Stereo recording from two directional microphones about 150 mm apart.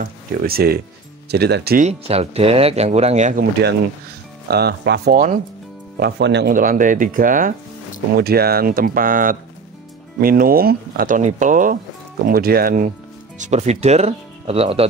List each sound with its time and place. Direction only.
0.0 s speech: 90° right
1.9 s speech: 45° right (ahead or behind)
4.5 s speech: 90° right; by 7.5 s 65° right (ahead or behind)
8.2 s speech: 90° right; by 12.9 s 70° right (ahead or behind)
13.4 s speech: 50° right (ahead or behind)